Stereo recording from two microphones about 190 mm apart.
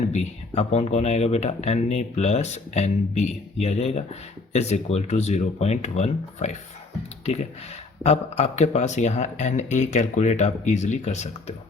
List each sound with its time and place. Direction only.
0.1 s speech: 35° left (ahead or behind)
8.0 s speech: 35° left (ahead or behind)